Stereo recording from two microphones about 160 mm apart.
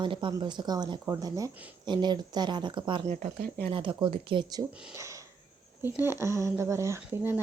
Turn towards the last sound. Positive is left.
turn(degrees=-15)  # may be behind; listen again after turning